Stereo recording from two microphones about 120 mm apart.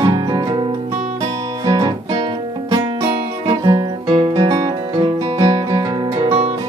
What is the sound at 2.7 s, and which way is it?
Music, 30° right (ahead or behind).